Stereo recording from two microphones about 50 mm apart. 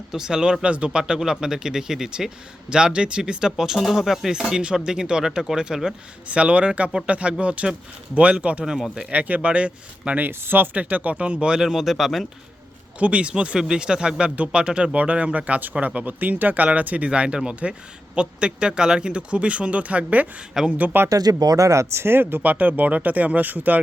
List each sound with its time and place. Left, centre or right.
0.1 s a man's voice: centre
6.2 s speech: right
10.4 s speech: right
10.8 s a man's voice: right; by 12.3 s centre
13.0 s a man's voice: right
17.1 s speech: centre
21.6 s speech: right
22.0 s speech: right
22.4 s speech: right